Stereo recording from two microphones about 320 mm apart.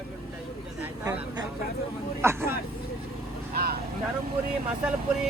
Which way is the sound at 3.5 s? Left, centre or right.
Right.